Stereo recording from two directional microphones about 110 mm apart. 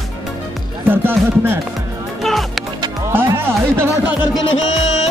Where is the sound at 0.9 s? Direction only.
20° right (ahead or behind).